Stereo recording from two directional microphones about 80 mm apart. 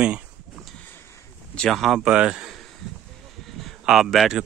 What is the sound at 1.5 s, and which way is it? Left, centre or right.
Speech, centre.